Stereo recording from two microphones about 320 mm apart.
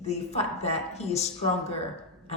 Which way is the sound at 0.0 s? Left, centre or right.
Centre.